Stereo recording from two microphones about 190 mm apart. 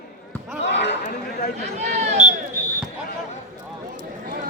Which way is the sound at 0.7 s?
65° left (ahead or behind).